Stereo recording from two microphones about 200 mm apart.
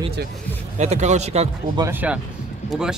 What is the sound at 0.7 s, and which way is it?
Speech, 35° right (ahead or behind).